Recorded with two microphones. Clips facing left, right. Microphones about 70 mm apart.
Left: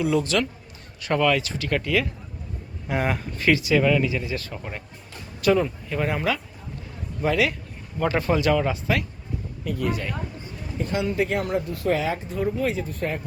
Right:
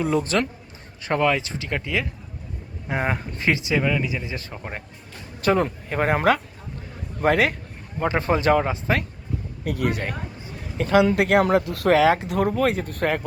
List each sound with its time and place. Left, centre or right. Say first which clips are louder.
0.0 s speech: even; right
7.9 s speech: even; right
9.6 s a woman's voice: right 2 dB; right
10.8 s speech: right 6 dB; right